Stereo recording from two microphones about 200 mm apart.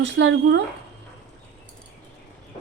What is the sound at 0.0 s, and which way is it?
Speech, 65° right (ahead or behind).